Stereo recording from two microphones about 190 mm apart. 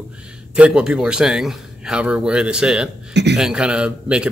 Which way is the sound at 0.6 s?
5° right (ahead or behind).